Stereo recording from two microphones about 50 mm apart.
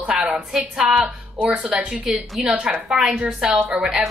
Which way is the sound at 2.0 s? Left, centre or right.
Centre.